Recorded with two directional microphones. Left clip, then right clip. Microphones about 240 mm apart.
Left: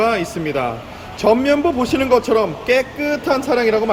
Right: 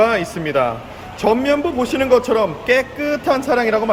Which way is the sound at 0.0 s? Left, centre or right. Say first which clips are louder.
Right 2 dB; centre.